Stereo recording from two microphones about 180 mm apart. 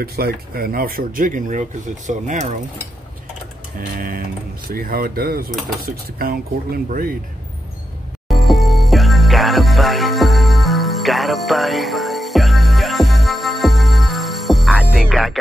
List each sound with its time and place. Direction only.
0.0 s speech: 60° right (ahead or behind); by 2.5 s 40° right (ahead or behind)
4.6 s speech: 55° right (ahead or behind)
5.5 s cutlery: centre (ahead or behind)
5.8 s speech: 55° right (ahead or behind)
8.3 s music: centre (ahead or behind)